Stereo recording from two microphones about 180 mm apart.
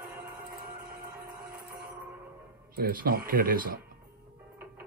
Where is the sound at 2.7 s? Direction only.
55° right (ahead or behind).